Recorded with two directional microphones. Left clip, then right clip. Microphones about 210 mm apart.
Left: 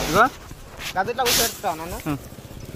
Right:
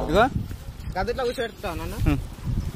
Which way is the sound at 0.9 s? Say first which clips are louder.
Left 3 dB; 30° right (ahead or behind).